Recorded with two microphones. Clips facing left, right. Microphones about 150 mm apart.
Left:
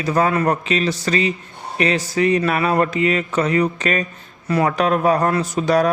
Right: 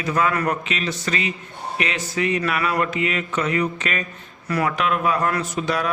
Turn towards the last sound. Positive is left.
turn(degrees=40)  # may be behind; listen again after turning